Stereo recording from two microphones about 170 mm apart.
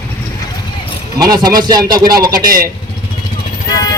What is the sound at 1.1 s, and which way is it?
Speech, 25° right (ahead or behind).